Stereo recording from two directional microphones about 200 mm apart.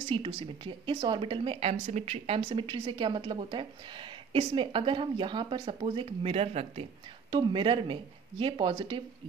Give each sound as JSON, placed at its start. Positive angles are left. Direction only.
{"t": 0.1, "sound": "speech", "side_deg": -25}